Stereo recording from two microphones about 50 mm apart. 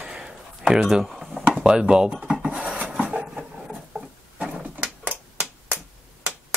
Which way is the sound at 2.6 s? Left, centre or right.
Right.